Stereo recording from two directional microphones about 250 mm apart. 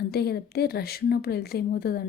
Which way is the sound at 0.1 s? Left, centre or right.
Left.